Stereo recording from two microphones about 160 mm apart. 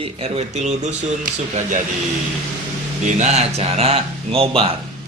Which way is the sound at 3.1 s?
45° right (ahead or behind).